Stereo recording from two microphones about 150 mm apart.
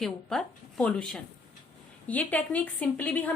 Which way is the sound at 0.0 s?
5° left (ahead or behind).